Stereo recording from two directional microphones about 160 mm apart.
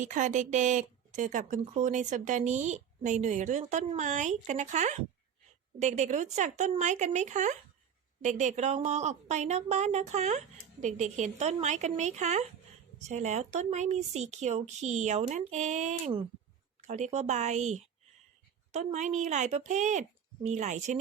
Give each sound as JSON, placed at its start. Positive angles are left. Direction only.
{"t": 0.0, "sound": "speech", "side_deg": -50}